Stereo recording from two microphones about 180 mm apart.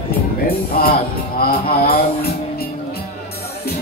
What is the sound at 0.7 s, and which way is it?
Speech, 55° left (ahead or behind).